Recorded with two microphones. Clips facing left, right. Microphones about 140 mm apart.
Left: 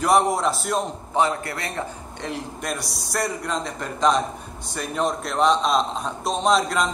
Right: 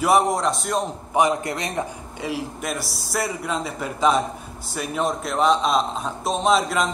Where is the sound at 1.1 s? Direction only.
15° right (ahead or behind).